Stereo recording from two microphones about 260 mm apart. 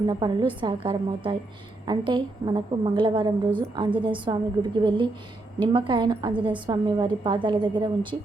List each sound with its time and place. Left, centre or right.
0.1 s a woman's voice: centre